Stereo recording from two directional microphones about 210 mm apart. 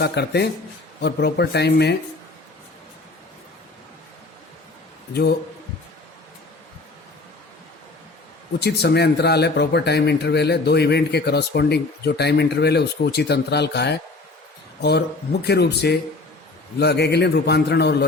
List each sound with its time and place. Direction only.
0.0 s speech: 50° left (ahead or behind)
8.5 s speech: 50° left (ahead or behind)